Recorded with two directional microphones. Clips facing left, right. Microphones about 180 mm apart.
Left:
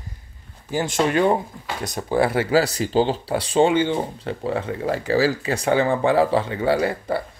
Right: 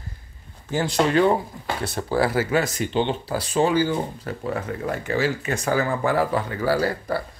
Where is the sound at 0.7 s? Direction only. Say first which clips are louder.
Even; 20° left (ahead or behind).